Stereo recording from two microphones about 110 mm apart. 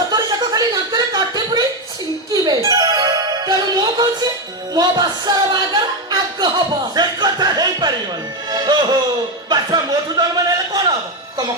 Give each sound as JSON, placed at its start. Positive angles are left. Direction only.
{"t": 0.1, "sound": "chuckle", "side_deg": -35}
{"t": 2.3, "sound": "music", "side_deg": -35}
{"t": 4.7, "sound": "speech", "side_deg": -35}
{"t": 6.9, "sound": "music", "side_deg": -40}
{"t": 9.5, "sound": "a sound", "side_deg": -35}